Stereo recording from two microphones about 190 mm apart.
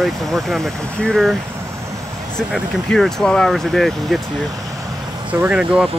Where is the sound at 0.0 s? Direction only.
Centre (ahead or behind).